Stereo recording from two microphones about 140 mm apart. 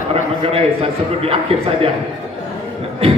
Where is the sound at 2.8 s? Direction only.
45° right (ahead or behind).